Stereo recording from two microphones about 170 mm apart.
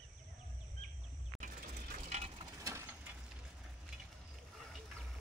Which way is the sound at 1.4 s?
50° right (ahead or behind).